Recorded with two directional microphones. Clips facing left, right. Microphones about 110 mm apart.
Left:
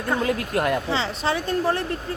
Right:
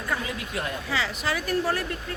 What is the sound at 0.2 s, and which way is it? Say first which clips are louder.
Speech: left 9 dB; 55° left (ahead or behind).